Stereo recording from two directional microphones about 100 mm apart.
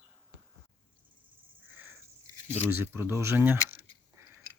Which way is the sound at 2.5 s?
25° right (ahead or behind).